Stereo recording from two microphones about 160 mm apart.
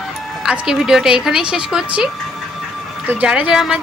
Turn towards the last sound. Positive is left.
turn(degrees=-5)  # may be behind; listen again after turning